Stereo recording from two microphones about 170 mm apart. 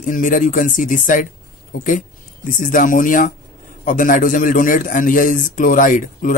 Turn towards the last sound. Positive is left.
turn(degrees=50)  # may be behind; listen again after turning